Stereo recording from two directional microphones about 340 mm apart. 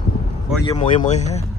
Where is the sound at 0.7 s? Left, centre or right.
Left.